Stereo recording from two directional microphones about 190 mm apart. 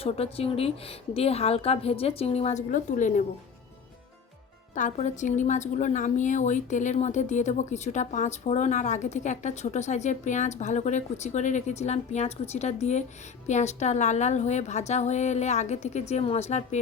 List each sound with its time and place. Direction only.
0.0 s a woman's voice: 30° left (ahead or behind)
4.7 s a woman's voice: 40° left (ahead or behind)